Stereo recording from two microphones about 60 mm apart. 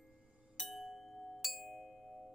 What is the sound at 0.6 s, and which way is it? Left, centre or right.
Glockenspiel, centre.